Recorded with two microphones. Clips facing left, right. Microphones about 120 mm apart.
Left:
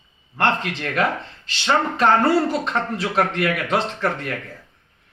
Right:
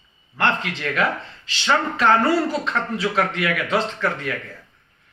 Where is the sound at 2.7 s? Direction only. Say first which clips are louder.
Left 1 dB; 30° left (ahead or behind).